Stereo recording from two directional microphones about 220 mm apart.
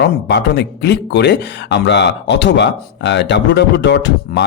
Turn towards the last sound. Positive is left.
turn(degrees=50)  # may be behind; listen again after turning